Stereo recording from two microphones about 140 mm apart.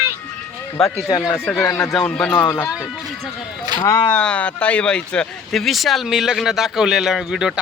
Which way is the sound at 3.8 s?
25° left (ahead or behind).